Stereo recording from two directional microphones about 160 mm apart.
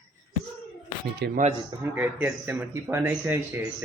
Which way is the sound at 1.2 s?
90° right.